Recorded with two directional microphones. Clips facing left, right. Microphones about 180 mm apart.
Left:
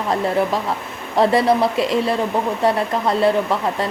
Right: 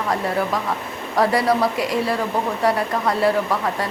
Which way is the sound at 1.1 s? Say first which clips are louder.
Left 3 dB; 25° left (ahead or behind).